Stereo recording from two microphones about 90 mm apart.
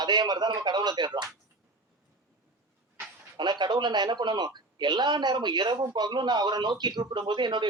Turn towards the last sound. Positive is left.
turn(degrees=-60)  # may be behind; listen again after turning